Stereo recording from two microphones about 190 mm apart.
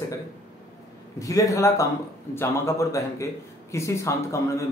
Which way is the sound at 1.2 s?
15° left (ahead or behind).